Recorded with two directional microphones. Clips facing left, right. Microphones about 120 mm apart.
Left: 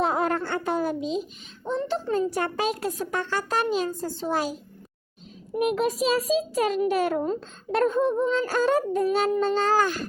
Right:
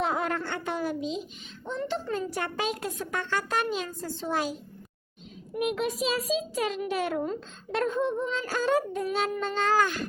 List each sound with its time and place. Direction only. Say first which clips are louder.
0.0 s a sound: left 4 dB; 35° left (ahead or behind)
1.6 s a child's voice: left 4 dB; 35° left (ahead or behind)
5.5 s a child's voice: left 5 dB; 40° left (ahead or behind)